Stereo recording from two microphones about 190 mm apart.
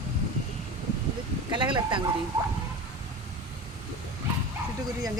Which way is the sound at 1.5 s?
25° right (ahead or behind).